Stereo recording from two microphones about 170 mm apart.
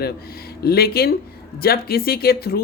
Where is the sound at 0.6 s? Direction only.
65° left (ahead or behind).